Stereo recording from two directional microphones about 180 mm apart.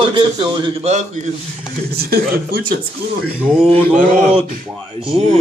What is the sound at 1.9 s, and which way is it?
Speech, 60° right (ahead or behind).